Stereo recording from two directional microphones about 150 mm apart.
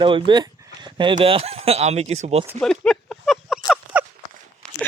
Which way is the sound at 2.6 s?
5° left (ahead or behind).